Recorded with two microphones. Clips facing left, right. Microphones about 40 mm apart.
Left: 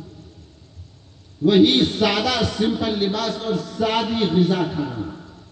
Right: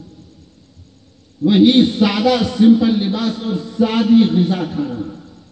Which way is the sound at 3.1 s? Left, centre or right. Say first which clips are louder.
Right 3 dB; centre.